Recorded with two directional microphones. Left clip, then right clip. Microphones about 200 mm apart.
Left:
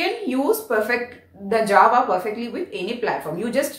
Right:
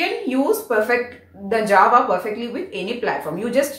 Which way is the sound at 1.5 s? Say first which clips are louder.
Right 1 dB; 20° left (ahead or behind).